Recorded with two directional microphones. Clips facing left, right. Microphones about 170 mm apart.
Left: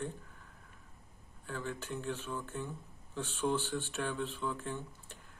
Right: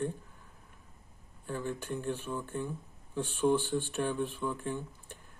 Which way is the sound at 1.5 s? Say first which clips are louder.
Right 4 dB; 15° right (ahead or behind).